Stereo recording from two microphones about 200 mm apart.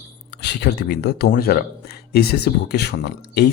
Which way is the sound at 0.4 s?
55° left (ahead or behind).